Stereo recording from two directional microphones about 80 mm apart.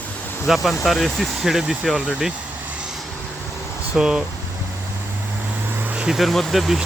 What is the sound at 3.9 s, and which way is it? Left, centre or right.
Speech, centre.